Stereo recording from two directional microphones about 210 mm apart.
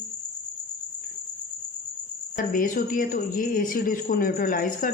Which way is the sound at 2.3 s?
40° left (ahead or behind).